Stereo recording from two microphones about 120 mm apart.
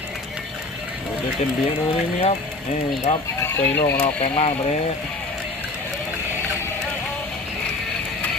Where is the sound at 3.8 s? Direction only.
60° left (ahead or behind).